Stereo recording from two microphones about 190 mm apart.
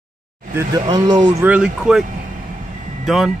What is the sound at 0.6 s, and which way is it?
Speech, 20° right (ahead or behind).